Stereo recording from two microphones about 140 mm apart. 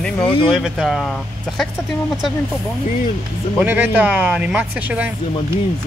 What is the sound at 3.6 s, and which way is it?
Speech, 10° right (ahead or behind).